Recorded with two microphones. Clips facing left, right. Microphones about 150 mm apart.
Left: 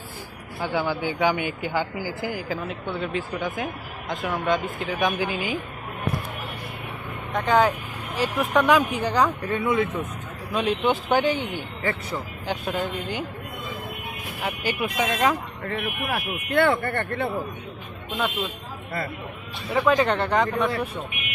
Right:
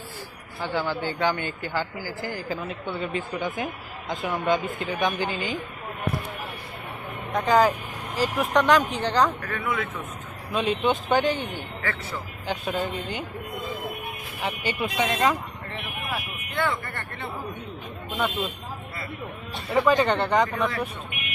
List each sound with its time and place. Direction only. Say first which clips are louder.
0.6 s a man's voice: left 2 dB; 10° left (ahead or behind)
2.5 s a woman's voice: left 1 dB; centre (ahead or behind)
7.3 s a woman's voice: even; centre (ahead or behind)
9.4 s speech: left 6 dB; 20° left (ahead or behind)
10.5 s a woman's voice: left 1 dB; centre (ahead or behind)
12.5 s a woman's voice: even; 5° left (ahead or behind)
14.4 s a woman's voice: left 1 dB; 5° left (ahead or behind)
15.6 s speech: left 6 dB; 60° left (ahead or behind)
19.7 s a woman's voice: even; centre (ahead or behind)